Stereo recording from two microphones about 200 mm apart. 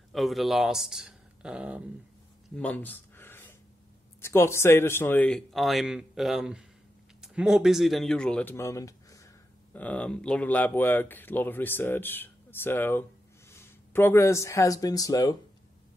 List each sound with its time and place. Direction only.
0.1 s speech: centre (ahead or behind)
2.5 s a sound: 5° left (ahead or behind)
4.2 s a man's voice: 10° left (ahead or behind)